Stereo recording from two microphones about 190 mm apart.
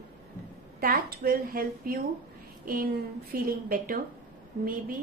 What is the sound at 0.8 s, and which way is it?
A woman's voice, 50° right (ahead or behind).